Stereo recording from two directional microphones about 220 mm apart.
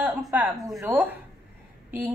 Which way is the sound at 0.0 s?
5° right (ahead or behind).